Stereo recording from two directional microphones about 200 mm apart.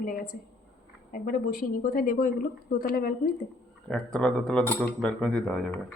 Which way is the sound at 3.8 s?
5° left (ahead or behind).